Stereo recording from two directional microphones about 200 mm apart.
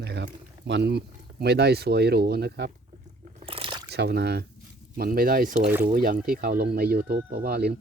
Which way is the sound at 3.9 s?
55° right (ahead or behind).